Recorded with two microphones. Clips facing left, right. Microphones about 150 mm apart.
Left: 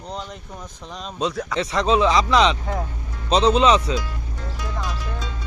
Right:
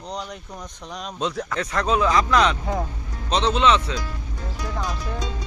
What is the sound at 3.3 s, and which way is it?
Speech, 35° left (ahead or behind).